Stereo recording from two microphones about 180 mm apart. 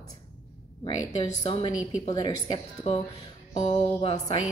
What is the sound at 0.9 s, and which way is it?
A woman's voice, 25° left (ahead or behind).